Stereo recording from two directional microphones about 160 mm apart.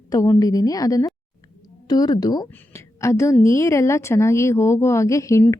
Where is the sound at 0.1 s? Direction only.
20° left (ahead or behind).